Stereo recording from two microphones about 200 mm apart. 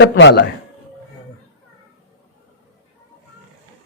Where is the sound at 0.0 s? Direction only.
60° left (ahead or behind).